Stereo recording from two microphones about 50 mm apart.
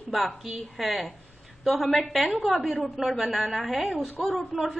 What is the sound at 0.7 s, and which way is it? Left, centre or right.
A woman's voice, centre.